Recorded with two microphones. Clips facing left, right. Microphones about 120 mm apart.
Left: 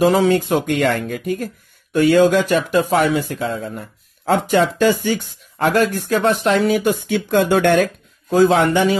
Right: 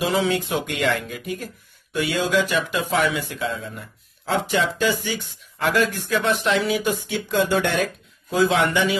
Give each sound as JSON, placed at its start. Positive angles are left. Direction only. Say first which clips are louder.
{"t": 0.0, "sound": "speech", "louder": "left 7 dB", "side_deg": 45}